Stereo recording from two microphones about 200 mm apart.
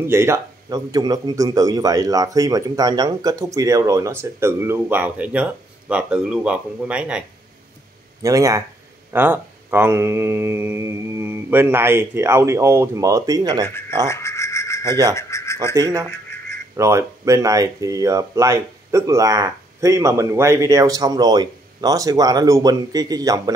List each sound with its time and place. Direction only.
0.0 s a man's voice: 15° right (ahead or behind)
8.2 s a man's voice: 15° right (ahead or behind)
13.7 s speech: 10° left (ahead or behind)
14.0 s rub: 15° left (ahead or behind)
15.1 s speech: 15° left (ahead or behind)
15.7 s a man's voice: 15° right (ahead or behind)